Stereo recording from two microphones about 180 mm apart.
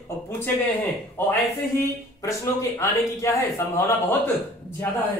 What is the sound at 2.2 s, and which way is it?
A man's voice, 15° left (ahead or behind).